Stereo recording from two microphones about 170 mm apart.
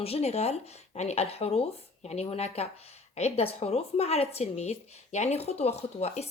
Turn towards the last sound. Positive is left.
turn(degrees=40)  # may be behind; listen again after turning